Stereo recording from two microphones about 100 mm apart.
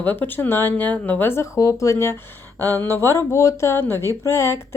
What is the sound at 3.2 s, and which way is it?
A woman's voice, 30° left (ahead or behind).